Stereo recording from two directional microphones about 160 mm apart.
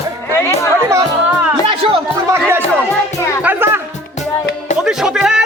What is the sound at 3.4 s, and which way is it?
Music, 15° right (ahead or behind).